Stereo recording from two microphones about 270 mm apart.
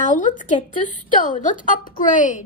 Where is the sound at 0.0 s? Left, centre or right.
Left.